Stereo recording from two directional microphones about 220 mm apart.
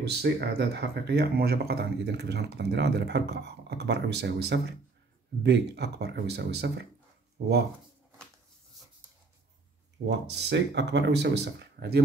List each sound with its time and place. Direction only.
0.0 s speech: 45° right (ahead or behind)
10.0 s speech: 50° right (ahead or behind)